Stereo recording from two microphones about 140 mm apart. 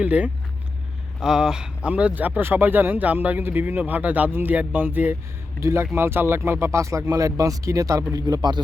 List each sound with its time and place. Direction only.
0.0 s speech: 10° right (ahead or behind); by 8.6 s 30° right (ahead or behind)